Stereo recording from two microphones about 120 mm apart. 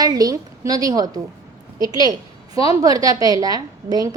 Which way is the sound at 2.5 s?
30° right (ahead or behind).